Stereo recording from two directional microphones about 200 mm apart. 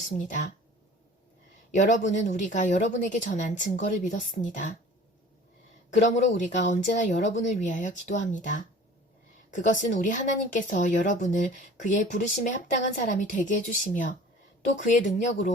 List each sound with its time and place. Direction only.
1.7 s speech: 35° left (ahead or behind)
5.9 s speech: 35° left (ahead or behind)